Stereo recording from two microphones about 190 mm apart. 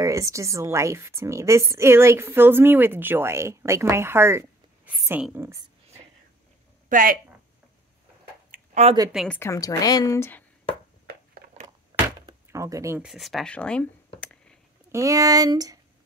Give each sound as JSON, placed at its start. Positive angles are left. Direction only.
{"t": 0.0, "sound": "a woman's voice", "side_deg": -15}
{"t": 6.9, "sound": "speech", "side_deg": -45}
{"t": 8.5, "sound": "a sound", "side_deg": -35}
{"t": 9.1, "sound": "a woman's voice", "side_deg": 0}
{"t": 9.4, "sound": "a woman's voice", "side_deg": 15}
{"t": 11.6, "sound": "door", "side_deg": -15}
{"t": 13.0, "sound": "a sound", "side_deg": 0}
{"t": 14.9, "sound": "speech", "side_deg": -15}